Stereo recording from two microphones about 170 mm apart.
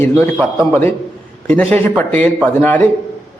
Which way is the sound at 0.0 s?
10° left (ahead or behind).